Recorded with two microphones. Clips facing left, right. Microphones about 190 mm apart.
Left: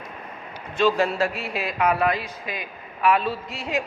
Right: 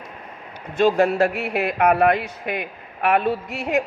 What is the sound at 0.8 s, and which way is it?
A man's voice, 55° right (ahead or behind).